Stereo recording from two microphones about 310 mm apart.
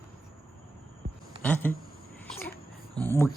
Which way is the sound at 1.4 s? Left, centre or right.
Centre.